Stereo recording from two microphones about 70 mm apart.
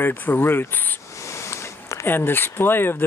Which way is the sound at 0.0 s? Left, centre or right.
Left.